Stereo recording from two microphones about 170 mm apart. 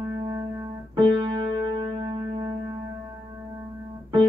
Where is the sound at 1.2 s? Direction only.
30° right (ahead or behind).